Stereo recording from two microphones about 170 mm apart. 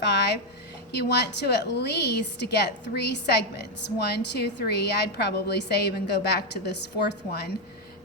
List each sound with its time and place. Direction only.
0.0 s music: 75° left (ahead or behind)
0.9 s a woman's voice: 80° left